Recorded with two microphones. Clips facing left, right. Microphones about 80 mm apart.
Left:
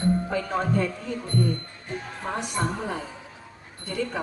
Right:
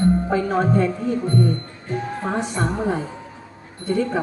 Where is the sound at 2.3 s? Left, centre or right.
Right.